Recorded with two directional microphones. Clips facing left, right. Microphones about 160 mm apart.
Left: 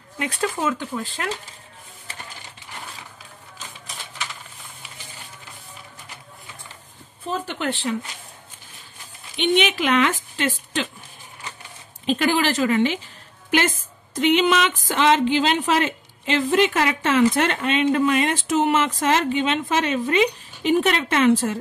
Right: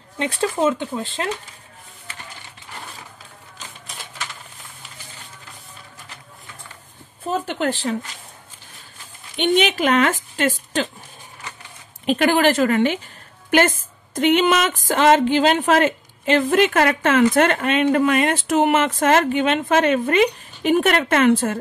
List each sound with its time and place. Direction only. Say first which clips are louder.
0.2 s speech: right 4 dB; 30° right (ahead or behind)
7.2 s speech: right 4 dB; 45° right (ahead or behind)
9.4 s a woman's voice: right 2 dB; 40° right (ahead or behind)
12.1 s a woman's voice: right 4 dB; 55° right (ahead or behind)